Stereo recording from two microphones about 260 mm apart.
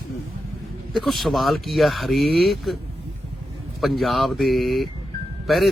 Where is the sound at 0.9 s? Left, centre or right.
Centre.